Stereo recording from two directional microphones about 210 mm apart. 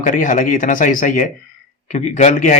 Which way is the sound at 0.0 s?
40° left (ahead or behind).